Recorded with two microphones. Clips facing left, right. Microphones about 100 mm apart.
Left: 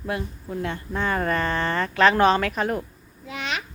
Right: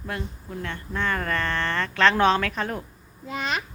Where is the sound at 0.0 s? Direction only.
10° left (ahead or behind).